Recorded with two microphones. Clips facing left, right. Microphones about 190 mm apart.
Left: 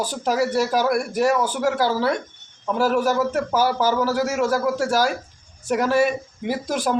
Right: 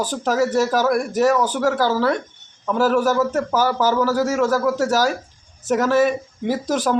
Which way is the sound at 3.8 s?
45° right (ahead or behind).